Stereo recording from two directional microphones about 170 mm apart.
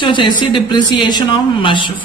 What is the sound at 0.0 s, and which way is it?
Speech, 30° left (ahead or behind).